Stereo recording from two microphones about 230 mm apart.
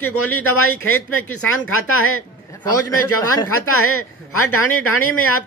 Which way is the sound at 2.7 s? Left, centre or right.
Left.